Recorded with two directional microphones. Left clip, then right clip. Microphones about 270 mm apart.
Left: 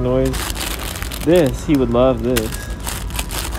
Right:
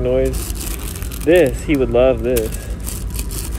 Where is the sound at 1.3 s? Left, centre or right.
Left.